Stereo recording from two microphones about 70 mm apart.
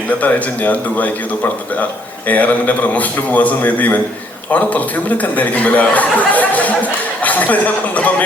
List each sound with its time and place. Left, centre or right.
0.2 s a man's voice: left